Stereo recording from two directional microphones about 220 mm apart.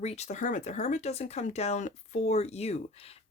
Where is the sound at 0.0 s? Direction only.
30° left (ahead or behind).